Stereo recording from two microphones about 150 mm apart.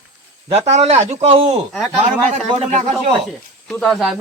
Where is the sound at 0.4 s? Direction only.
45° right (ahead or behind).